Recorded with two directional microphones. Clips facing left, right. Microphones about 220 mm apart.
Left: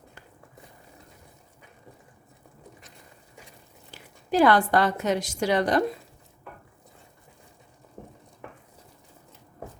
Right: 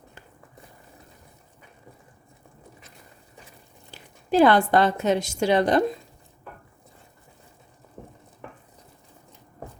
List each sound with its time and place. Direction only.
4.3 s a woman's voice: 25° right (ahead or behind)